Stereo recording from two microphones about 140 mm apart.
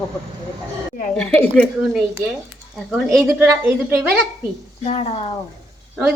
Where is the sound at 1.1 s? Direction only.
10° left (ahead or behind).